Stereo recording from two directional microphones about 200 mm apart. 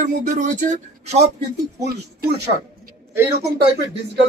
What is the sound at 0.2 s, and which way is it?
Speech, 35° right (ahead or behind).